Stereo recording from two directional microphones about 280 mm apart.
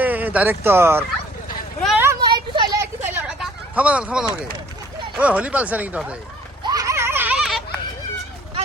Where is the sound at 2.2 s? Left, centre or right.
Centre.